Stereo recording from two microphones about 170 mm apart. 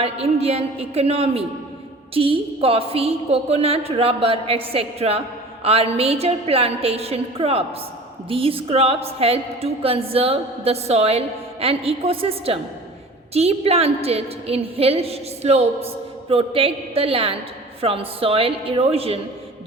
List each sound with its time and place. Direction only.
0.0 s a woman's voice: 35° right (ahead or behind)